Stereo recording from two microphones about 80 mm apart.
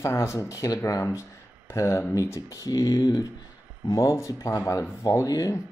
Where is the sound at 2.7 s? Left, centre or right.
Left.